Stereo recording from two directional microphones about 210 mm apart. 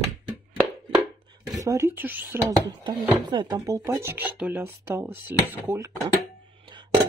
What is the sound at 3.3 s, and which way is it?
Speech, 20° right (ahead or behind).